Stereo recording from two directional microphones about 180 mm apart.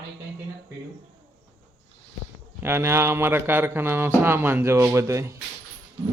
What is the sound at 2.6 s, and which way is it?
A man's voice, 15° right (ahead or behind).